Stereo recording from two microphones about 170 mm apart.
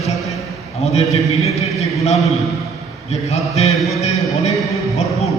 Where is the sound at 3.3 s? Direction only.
40° left (ahead or behind).